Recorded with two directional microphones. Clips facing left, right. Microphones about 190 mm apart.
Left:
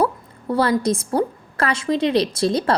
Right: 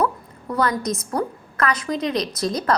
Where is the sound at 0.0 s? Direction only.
30° left (ahead or behind).